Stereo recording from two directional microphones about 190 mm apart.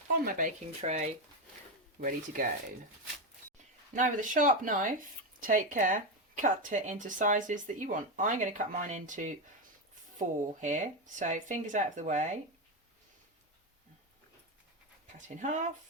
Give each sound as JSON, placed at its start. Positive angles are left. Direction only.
{"t": 0.3, "sound": "speech", "side_deg": -40}
{"t": 3.9, "sound": "speech", "side_deg": -45}
{"t": 15.4, "sound": "speech", "side_deg": -40}